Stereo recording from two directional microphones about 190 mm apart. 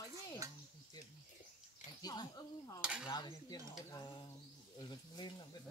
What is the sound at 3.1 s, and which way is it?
Speech, 20° left (ahead or behind).